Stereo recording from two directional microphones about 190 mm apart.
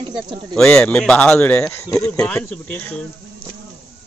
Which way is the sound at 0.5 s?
5° left (ahead or behind).